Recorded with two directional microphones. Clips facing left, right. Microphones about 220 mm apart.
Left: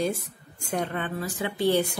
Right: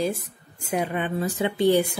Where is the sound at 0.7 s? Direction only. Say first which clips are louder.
Right 3 dB; 10° right (ahead or behind).